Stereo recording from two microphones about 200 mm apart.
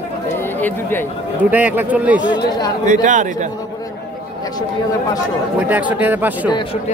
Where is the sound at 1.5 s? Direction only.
10° right (ahead or behind).